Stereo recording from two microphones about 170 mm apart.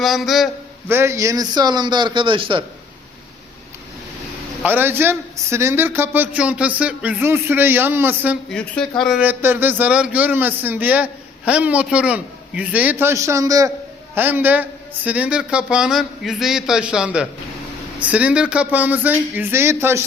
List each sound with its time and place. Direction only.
0.0 s a man's voice: centre (ahead or behind)
0.9 s a man's voice: 15° right (ahead or behind); by 2.6 s 30° right (ahead or behind)
4.6 s a man's voice: 10° right (ahead or behind)
8.4 s a man's voice: 5° left (ahead or behind); by 20.1 s 15° right (ahead or behind)